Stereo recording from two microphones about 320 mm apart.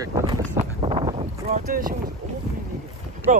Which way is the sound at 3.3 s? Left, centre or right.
Right.